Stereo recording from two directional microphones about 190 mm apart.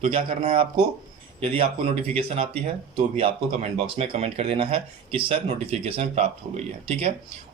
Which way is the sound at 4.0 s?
30° right (ahead or behind).